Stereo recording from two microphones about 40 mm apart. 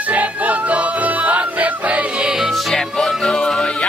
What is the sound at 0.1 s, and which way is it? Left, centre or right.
Music, right.